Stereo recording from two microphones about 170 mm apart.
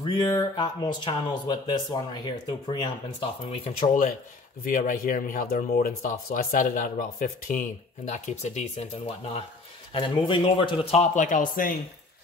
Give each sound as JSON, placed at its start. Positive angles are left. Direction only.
{"t": 0.0, "sound": "speech", "side_deg": 25}
{"t": 4.6, "sound": "speech", "side_deg": 50}
{"t": 9.9, "sound": "a man's voice", "side_deg": 30}